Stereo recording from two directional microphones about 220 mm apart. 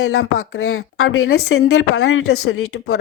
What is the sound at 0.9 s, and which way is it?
Speech, 70° left (ahead or behind).